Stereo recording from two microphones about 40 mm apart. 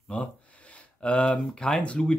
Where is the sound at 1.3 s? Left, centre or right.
Centre.